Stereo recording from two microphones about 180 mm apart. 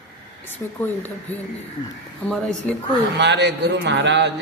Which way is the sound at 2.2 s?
5° left (ahead or behind).